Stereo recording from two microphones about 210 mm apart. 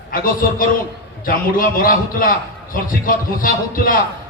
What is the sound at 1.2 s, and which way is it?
A man's voice, 40° left (ahead or behind).